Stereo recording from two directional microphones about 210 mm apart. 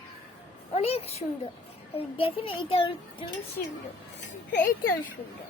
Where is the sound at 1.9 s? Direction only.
25° left (ahead or behind).